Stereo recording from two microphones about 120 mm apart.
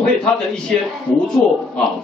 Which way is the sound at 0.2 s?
5° left (ahead or behind).